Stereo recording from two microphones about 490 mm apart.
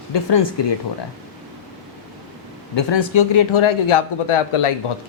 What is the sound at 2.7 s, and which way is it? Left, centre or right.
A man's voice, left.